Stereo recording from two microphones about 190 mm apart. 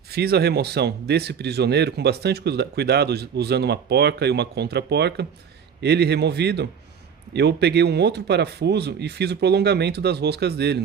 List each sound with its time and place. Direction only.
0.1 s speech: 55° right (ahead or behind)